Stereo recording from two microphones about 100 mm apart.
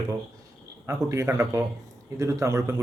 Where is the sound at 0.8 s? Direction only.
30° right (ahead or behind).